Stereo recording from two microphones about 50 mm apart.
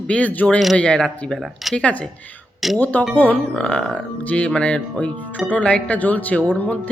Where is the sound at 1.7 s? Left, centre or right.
Left.